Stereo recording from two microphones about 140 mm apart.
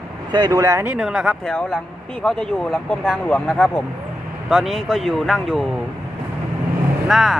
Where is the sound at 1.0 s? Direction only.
Centre (ahead or behind).